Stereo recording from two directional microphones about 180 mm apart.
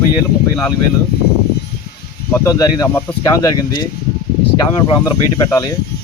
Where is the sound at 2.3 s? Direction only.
15° left (ahead or behind).